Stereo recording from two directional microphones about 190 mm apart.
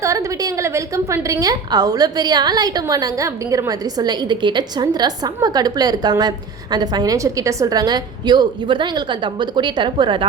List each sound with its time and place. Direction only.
0.0 s a woman's voice: 15° right (ahead or behind)